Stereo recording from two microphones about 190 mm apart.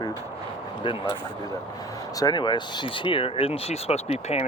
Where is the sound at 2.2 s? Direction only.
20° left (ahead or behind).